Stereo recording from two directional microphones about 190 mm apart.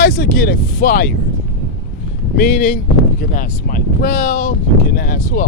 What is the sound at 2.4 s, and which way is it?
Speech, 45° left (ahead or behind).